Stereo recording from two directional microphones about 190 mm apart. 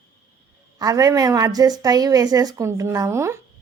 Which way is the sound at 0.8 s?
20° right (ahead or behind).